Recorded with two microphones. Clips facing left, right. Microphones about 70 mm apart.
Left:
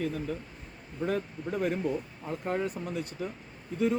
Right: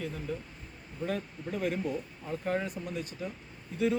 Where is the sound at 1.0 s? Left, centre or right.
Left.